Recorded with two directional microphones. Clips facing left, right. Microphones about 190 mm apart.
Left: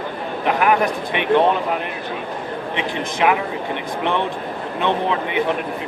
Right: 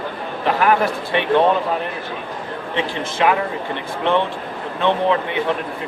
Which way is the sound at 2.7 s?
15° left (ahead or behind).